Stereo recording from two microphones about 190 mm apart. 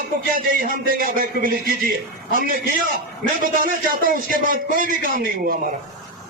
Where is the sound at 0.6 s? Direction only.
50° right (ahead or behind).